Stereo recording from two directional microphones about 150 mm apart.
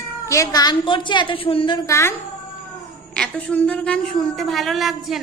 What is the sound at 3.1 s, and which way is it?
A woman's voice, 5° left (ahead or behind).